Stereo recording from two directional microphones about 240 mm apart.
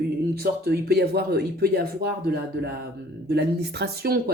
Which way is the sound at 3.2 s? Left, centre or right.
Right.